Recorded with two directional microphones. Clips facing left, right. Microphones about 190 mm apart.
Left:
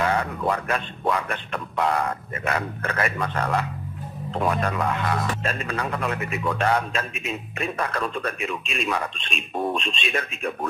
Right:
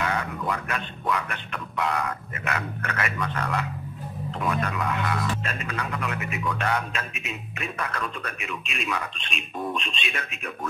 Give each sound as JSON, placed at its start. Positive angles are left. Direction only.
{"t": 0.0, "sound": "a man's voice", "side_deg": 35}